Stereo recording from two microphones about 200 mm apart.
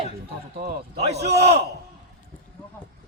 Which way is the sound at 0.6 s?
50° right (ahead or behind).